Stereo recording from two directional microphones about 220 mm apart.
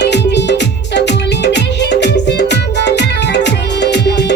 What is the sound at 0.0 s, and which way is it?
Music, 50° left (ahead or behind).